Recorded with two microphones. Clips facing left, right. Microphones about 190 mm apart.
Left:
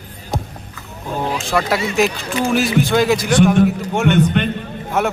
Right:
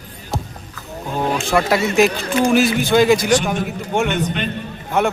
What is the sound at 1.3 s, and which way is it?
Speech, centre (ahead or behind).